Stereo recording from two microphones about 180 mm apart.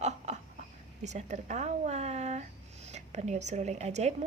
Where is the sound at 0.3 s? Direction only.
40° right (ahead or behind).